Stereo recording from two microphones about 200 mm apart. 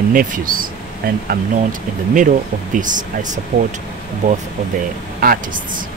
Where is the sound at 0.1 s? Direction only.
45° right (ahead or behind).